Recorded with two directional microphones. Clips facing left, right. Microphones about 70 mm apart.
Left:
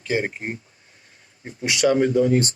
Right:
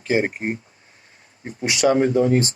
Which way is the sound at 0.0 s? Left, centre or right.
Right.